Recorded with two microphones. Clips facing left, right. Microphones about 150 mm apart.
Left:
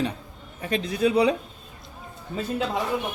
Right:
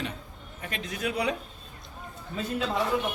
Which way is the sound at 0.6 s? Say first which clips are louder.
Left 10 dB; 30° left (ahead or behind).